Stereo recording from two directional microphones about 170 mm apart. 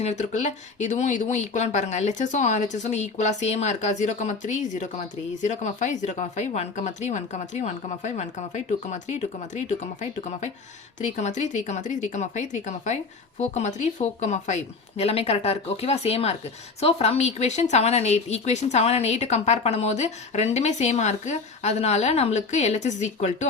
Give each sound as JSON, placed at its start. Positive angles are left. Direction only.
{"t": 0.0, "sound": "a woman's voice", "side_deg": 40}